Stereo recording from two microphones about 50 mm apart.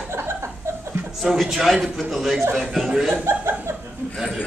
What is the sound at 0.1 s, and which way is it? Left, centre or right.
Chuckle, right.